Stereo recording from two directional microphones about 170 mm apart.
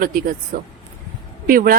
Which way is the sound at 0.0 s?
55° right (ahead or behind).